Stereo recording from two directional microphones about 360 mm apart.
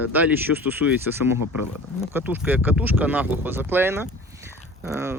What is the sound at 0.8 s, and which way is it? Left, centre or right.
Speech, left.